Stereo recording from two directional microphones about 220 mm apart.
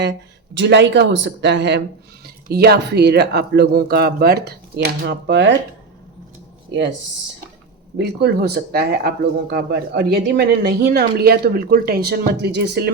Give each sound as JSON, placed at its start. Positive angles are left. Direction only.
{"t": 0.5, "sound": "speech", "side_deg": -55}
{"t": 7.9, "sound": "speech", "side_deg": -50}